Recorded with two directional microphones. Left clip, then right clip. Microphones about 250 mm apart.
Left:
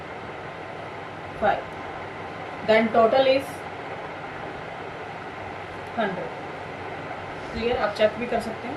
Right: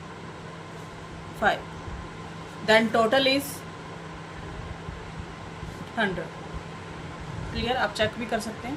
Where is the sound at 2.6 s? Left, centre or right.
Right.